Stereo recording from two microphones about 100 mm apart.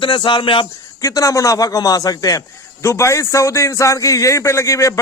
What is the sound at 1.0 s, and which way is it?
A man's voice, 35° left (ahead or behind).